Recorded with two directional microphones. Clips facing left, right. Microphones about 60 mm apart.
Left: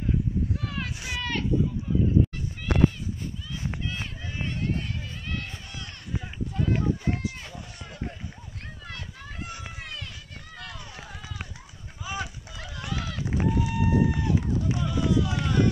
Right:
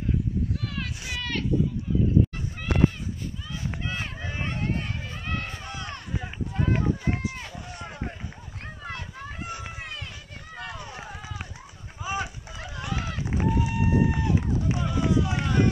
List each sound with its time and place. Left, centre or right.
0.7 s a sound: centre
3.8 s run: right
13.2 s run: centre